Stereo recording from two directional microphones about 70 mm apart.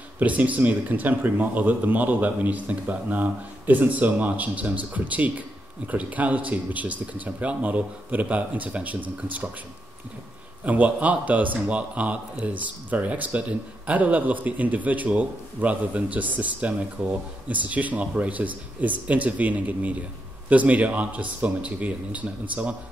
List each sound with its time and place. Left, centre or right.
0.2 s a man's voice: right
10.6 s a man's voice: right